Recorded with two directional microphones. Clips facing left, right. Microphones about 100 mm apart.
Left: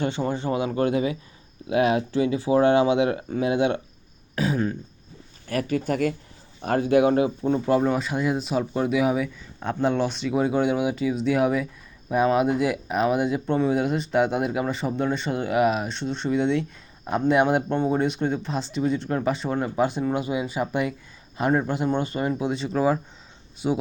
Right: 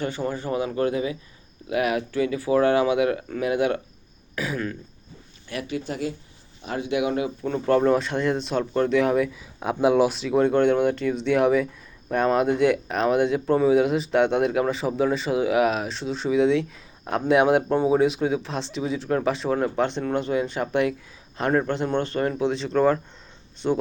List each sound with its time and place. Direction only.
0.0 s speech: 25° left (ahead or behind)
5.5 s speech: 45° left (ahead or behind)
7.3 s speech: 20° left (ahead or behind)
7.6 s speech: 5° left (ahead or behind)
9.6 s speech: 10° right (ahead or behind); by 23.8 s 10° left (ahead or behind)